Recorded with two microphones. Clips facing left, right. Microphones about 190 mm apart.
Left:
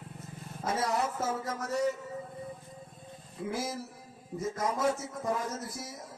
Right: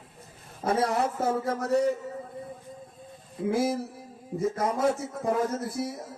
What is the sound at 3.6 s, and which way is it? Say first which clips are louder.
Speech: right 9 dB; 60° right (ahead or behind).